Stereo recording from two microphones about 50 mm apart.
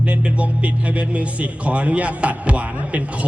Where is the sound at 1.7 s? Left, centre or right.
Right.